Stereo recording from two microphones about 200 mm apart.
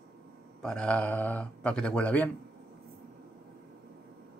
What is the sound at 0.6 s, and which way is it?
Speech, 5° left (ahead or behind).